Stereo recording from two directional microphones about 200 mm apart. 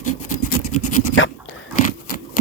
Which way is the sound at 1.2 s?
75° left (ahead or behind).